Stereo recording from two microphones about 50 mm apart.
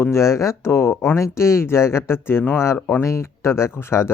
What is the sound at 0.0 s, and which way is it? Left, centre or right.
Speech, left.